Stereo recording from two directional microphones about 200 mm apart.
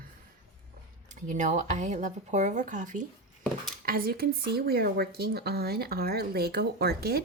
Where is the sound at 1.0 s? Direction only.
40° right (ahead or behind).